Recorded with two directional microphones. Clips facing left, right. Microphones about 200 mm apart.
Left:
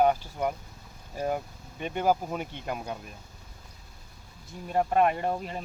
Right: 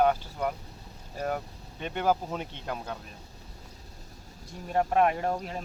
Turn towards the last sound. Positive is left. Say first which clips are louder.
# even
turn(degrees=0)  # may be behind; listen again after turning